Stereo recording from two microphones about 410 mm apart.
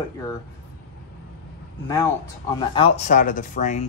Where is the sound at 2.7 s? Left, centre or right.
Centre.